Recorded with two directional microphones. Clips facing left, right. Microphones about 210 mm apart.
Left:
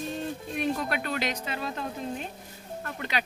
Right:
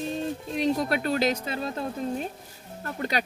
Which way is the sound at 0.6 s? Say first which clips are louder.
Right 4 dB; 35° right (ahead or behind).